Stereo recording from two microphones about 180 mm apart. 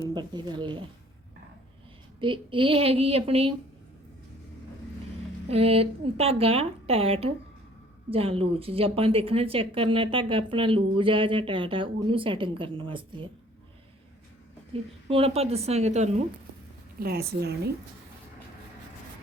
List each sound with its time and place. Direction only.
0.0 s speech: 25° right (ahead or behind)
2.2 s a woman's voice: 30° right (ahead or behind)
5.5 s a woman's voice: 35° right (ahead or behind)
14.7 s a woman's voice: 30° right (ahead or behind)
17.0 s a woman's voice: 60° right (ahead or behind)